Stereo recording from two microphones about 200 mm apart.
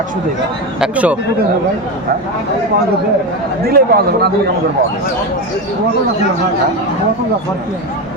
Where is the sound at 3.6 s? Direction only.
50° right (ahead or behind).